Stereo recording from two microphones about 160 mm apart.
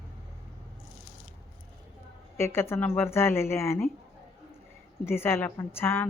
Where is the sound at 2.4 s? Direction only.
15° left (ahead or behind).